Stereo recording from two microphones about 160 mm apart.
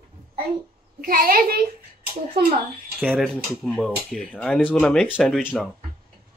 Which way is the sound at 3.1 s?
Centre (ahead or behind).